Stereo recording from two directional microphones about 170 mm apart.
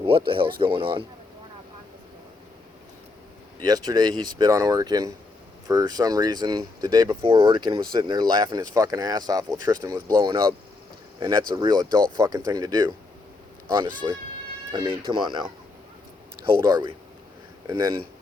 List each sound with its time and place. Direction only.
0.3 s speech: 30° right (ahead or behind)
3.6 s speech: 25° right (ahead or behind)
14.0 s speech: 25° right (ahead or behind)
16.6 s speech: 25° right (ahead or behind)